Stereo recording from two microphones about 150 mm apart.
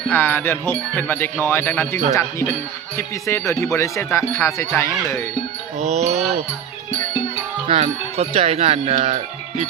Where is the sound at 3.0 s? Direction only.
20° left (ahead or behind).